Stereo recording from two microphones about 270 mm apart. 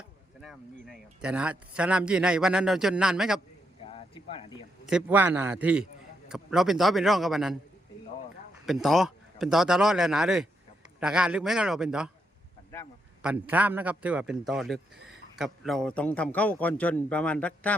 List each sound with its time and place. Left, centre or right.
0.4 s speech: centre
3.8 s a sound: left
4.9 s speech: centre
8.6 s speech: centre
13.2 s speech: centre